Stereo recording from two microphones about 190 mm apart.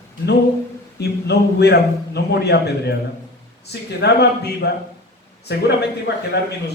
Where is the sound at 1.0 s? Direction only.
60° left (ahead or behind).